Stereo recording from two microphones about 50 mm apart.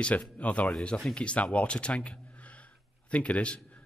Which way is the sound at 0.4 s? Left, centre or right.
Left.